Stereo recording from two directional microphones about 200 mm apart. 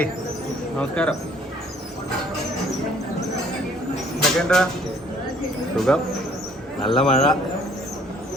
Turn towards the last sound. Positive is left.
turn(degrees=25)  # may be behind; listen again after turning